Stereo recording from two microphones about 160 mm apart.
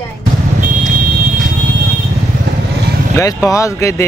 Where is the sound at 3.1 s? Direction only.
20° left (ahead or behind).